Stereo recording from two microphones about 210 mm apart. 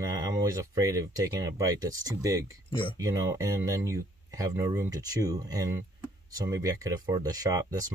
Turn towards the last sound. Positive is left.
turn(degrees=-15)  # may be behind; listen again after turning